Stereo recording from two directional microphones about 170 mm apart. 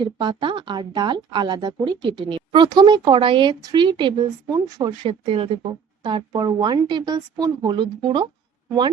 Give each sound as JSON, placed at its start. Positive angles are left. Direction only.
{"t": 0.0, "sound": "speech", "side_deg": -25}